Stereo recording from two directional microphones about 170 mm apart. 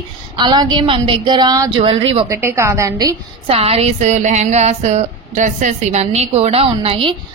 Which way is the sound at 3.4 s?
35° right (ahead or behind).